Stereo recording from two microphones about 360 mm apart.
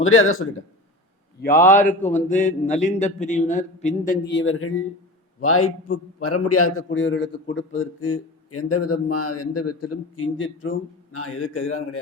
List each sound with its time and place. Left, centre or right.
0.0 s a man's voice: left
1.4 s a man's voice: left